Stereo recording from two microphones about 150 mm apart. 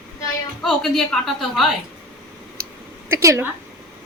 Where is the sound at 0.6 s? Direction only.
Centre (ahead or behind).